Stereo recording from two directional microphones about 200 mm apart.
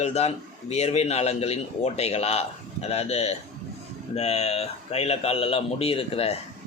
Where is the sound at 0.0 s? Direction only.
30° left (ahead or behind).